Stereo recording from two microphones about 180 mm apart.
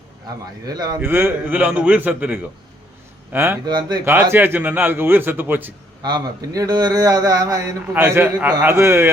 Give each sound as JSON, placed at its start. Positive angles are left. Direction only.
{"t": 0.7, "sound": "a man's voice", "side_deg": -20}
{"t": 3.7, "sound": "speech", "side_deg": -25}
{"t": 4.0, "sound": "a man's voice", "side_deg": -10}
{"t": 6.0, "sound": "speech", "side_deg": -20}